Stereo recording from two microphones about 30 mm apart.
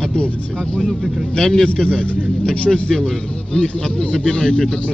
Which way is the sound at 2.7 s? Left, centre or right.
Right.